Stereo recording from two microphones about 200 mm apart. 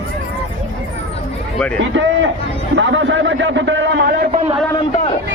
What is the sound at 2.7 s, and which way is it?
Speech, 70° right (ahead or behind).